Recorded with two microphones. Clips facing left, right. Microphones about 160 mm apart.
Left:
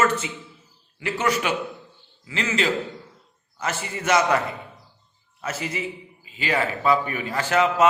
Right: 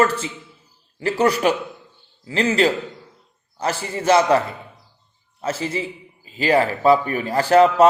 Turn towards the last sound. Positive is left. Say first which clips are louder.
# right 7 dB
turn(degrees=-35)  # may be behind; listen again after turning